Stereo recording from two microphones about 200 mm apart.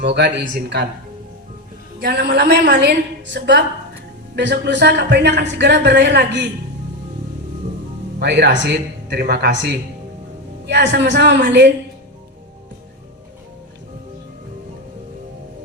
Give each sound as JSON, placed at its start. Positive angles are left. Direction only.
{"t": 0.0, "sound": "speech", "side_deg": -60}
{"t": 2.0, "sound": "speech", "side_deg": -50}
{"t": 8.2, "sound": "speech", "side_deg": -55}